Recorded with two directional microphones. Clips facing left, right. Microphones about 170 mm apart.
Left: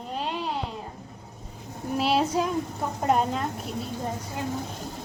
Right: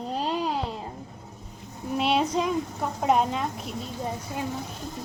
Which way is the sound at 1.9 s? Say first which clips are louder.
Even; centre (ahead or behind).